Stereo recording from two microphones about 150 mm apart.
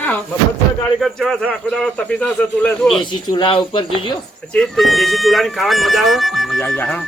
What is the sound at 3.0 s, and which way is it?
Speech, 30° left (ahead or behind).